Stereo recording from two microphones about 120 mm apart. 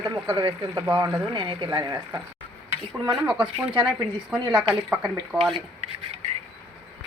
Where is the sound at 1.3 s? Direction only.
40° right (ahead or behind).